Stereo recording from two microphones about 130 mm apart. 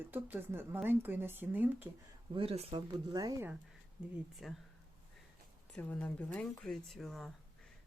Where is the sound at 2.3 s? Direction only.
45° right (ahead or behind).